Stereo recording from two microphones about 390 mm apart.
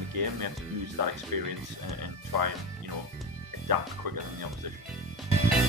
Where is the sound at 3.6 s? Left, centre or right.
Right.